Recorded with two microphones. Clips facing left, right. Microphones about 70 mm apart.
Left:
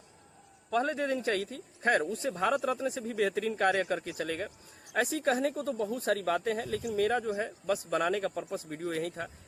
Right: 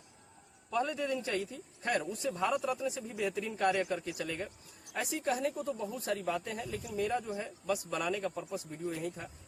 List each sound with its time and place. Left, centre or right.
0.7 s speech: left
2.7 s speech: left
3.1 s speech: left
5.1 s speech: left
7.7 s speech: left
8.7 s speech: left